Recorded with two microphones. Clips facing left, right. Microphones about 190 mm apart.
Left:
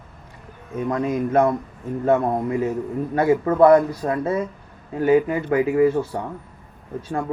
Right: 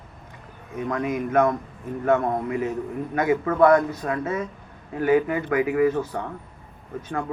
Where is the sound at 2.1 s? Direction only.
10° left (ahead or behind).